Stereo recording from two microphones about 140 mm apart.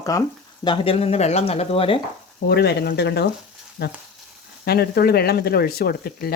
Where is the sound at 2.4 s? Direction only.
70° left (ahead or behind).